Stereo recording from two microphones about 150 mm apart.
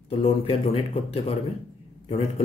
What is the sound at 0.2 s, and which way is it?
Speech, 40° left (ahead or behind).